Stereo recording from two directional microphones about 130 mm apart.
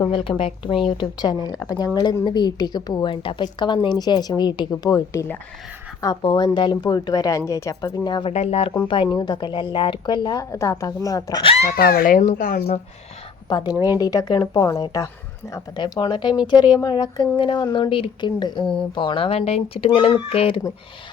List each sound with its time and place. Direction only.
0.0 s a woman's voice: 40° left (ahead or behind)
8.3 s speech: 55° left (ahead or behind)
9.0 s a woman's voice: 35° left (ahead or behind)
11.4 s speech: 55° left (ahead or behind)
11.7 s speech: 90° left
13.5 s a woman's voice: 30° left (ahead or behind)
15.8 s a woman's voice: 35° left (ahead or behind)